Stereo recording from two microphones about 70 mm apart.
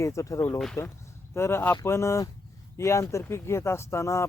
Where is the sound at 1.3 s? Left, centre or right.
Left.